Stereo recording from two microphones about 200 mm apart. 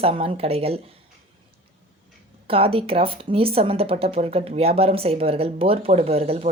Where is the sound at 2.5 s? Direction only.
30° right (ahead or behind).